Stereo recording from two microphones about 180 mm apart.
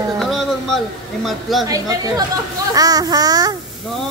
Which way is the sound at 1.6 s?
20° right (ahead or behind).